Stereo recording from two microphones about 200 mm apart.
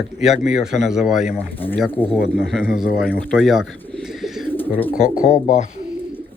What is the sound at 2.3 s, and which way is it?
Speech, 5° right (ahead or behind).